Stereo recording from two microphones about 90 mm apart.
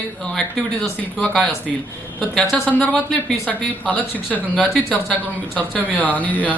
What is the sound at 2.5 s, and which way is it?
Speech, 15° left (ahead or behind).